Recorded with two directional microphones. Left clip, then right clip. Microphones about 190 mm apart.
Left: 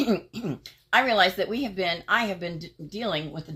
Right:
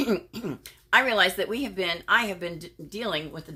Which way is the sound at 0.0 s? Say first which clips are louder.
Left 1 dB; 20° right (ahead or behind).